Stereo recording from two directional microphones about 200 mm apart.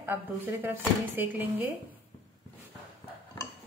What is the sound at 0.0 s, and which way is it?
A woman's voice, 10° right (ahead or behind).